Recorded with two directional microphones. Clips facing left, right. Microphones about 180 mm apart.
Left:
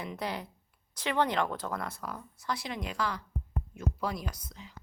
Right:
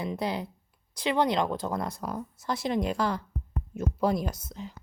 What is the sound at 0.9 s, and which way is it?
Speech, 15° right (ahead or behind).